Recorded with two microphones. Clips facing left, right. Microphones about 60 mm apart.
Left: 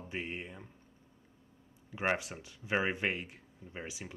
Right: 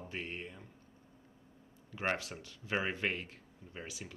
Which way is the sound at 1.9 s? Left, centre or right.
Centre.